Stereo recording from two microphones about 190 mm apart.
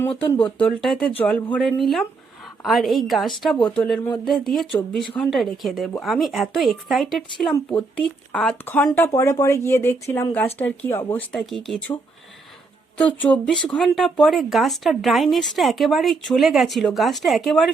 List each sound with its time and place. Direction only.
0.0 s speech: 10° left (ahead or behind)
7.5 s speech: 15° left (ahead or behind)
13.0 s speech: 5° left (ahead or behind)